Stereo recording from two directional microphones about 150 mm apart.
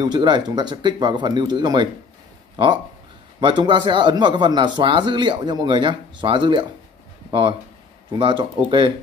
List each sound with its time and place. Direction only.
0.0 s speech: 30° right (ahead or behind)